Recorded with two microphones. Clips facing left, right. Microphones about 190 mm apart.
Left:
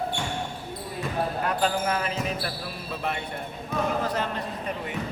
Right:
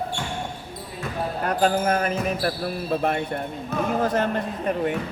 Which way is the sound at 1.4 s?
45° right (ahead or behind).